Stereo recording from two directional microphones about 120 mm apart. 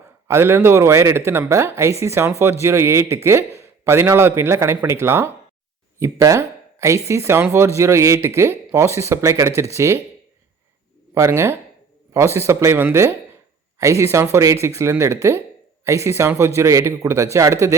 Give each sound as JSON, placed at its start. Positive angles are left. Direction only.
{"t": 0.3, "sound": "a man's voice", "side_deg": -20}
{"t": 11.1, "sound": "a man's voice", "side_deg": -25}